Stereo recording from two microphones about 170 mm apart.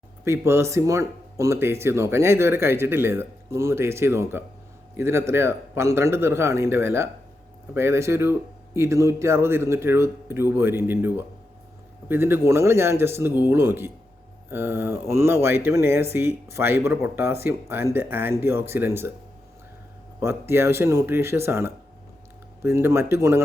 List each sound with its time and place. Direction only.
0.3 s speech: 15° right (ahead or behind)
20.1 s speech: 15° right (ahead or behind)